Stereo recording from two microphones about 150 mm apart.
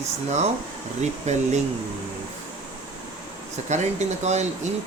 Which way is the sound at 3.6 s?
50° right (ahead or behind).